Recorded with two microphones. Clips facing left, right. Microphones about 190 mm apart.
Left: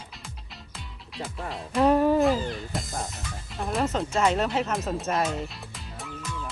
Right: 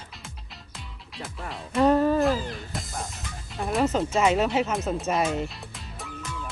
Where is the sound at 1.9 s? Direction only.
15° left (ahead or behind).